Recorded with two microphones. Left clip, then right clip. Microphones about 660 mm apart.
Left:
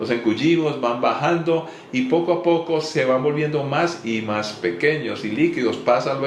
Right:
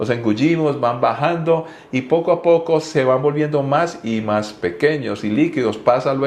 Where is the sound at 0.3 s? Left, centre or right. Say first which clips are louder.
Right 2 dB; right.